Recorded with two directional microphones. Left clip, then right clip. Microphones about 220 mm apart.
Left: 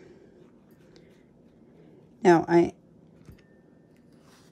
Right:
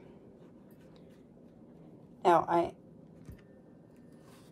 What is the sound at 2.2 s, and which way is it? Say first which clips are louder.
Speech: left 6 dB; 40° left (ahead or behind).